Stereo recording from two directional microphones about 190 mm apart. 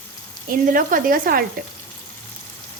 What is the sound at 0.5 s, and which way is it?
Speech, 45° right (ahead or behind).